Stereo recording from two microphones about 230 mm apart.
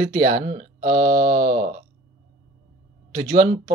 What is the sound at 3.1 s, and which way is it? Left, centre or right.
Speech, right.